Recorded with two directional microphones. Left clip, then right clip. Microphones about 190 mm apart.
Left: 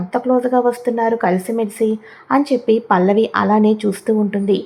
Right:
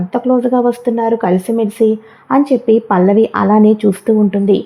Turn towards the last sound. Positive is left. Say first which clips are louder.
# right 5 dB
turn(degrees=-25)  # may be behind; listen again after turning